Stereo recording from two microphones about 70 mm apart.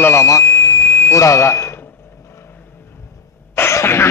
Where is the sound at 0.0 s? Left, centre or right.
Left.